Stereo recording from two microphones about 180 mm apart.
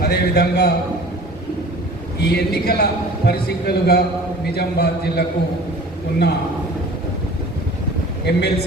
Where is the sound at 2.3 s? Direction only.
60° left (ahead or behind).